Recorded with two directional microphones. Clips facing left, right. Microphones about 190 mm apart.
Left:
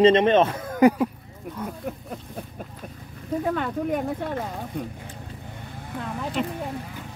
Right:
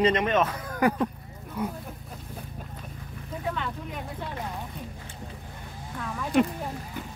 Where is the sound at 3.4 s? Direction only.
50° left (ahead or behind).